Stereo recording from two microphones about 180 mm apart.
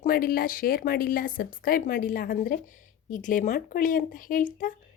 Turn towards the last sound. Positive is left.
turn(degrees=50)  # may be behind; listen again after turning